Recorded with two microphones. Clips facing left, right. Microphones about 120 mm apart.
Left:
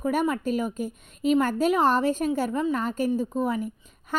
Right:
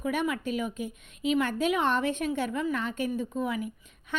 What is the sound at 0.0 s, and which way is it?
A woman's voice, 40° left (ahead or behind).